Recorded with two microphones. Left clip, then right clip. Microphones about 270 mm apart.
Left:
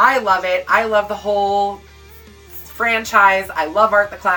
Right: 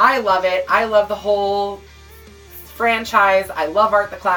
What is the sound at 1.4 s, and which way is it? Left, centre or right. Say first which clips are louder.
Music: left 2 dB; left.